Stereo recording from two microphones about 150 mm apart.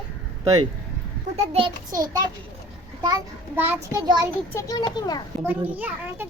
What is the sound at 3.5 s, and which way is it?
Speech, 15° right (ahead or behind).